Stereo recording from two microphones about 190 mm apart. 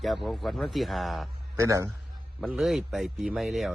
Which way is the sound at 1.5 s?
15° right (ahead or behind).